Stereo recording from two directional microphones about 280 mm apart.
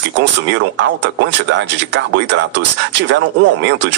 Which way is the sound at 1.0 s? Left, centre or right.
Right.